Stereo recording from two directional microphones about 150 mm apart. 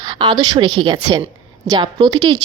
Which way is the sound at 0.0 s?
30° right (ahead or behind).